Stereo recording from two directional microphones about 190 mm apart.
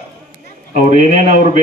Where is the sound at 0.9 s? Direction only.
40° right (ahead or behind).